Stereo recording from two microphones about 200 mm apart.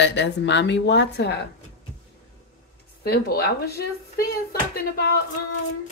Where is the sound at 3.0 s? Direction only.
50° left (ahead or behind).